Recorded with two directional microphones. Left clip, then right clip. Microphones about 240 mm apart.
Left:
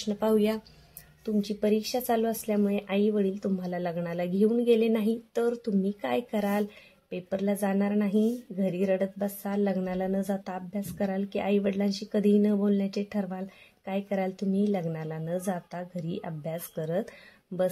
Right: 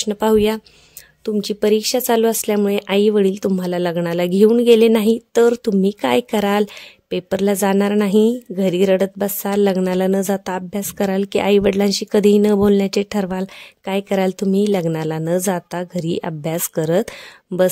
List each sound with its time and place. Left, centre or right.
0.0 s a woman's voice: right